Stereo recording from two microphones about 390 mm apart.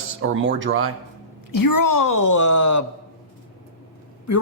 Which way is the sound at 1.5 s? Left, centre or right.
Left.